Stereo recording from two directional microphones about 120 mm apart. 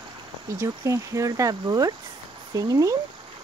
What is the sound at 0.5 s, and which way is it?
Speech, 25° right (ahead or behind).